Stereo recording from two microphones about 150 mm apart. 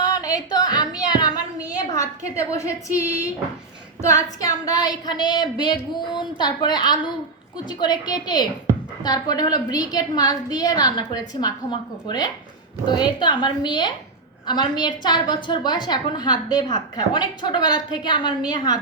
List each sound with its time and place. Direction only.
0.0 s a sound: 25° left (ahead or behind)
1.7 s a woman's voice: 25° left (ahead or behind)
4.0 s a woman's voice: 20° left (ahead or behind)